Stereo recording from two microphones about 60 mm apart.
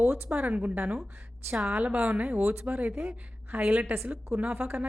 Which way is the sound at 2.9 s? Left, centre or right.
Centre.